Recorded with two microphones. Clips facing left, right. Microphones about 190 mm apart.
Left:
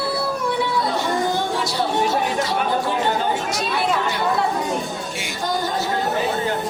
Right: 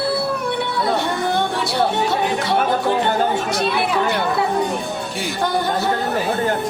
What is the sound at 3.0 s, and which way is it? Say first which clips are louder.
Chatter: right 3 dB; 60° right (ahead or behind).